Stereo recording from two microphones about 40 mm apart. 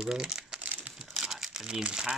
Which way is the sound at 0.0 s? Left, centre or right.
Centre.